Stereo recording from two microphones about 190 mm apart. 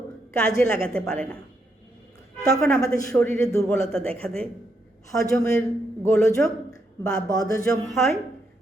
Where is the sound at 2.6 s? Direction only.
5° left (ahead or behind).